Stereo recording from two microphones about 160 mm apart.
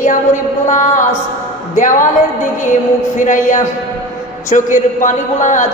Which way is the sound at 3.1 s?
50° left (ahead or behind).